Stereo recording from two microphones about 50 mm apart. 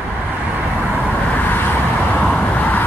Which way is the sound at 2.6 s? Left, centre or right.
Left.